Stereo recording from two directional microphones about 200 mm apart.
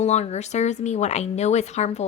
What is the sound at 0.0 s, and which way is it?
A woman's voice, 35° left (ahead or behind).